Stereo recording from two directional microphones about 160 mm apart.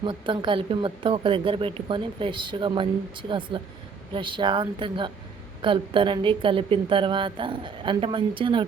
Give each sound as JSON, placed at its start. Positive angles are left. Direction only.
{"t": 0.0, "sound": "speech", "side_deg": -30}